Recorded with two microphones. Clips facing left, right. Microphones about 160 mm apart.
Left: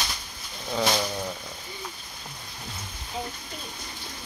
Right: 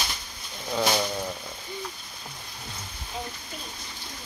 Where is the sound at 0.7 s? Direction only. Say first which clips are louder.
Even; 5° right (ahead or behind).